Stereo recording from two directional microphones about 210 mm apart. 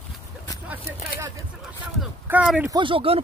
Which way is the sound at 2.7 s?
25° right (ahead or behind).